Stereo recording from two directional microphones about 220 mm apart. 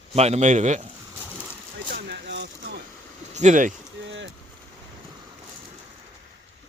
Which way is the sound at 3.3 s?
35° right (ahead or behind).